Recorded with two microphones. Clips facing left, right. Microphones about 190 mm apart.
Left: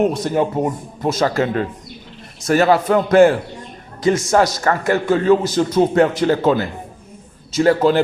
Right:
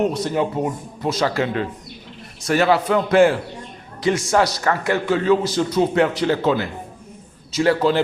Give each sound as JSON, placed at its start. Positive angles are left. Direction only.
{"t": 0.1, "sound": "a man's voice", "side_deg": 45}